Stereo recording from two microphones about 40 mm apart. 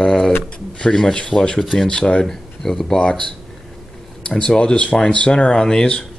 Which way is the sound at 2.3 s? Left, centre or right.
Centre.